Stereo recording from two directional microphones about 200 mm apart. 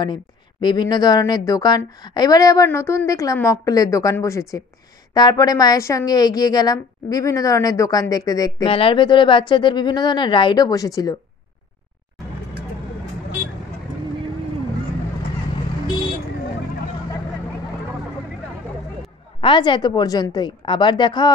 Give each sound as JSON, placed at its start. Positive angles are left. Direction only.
{"t": 0.0, "sound": "a woman's voice", "side_deg": 20}
{"t": 19.4, "sound": "a woman's voice", "side_deg": 25}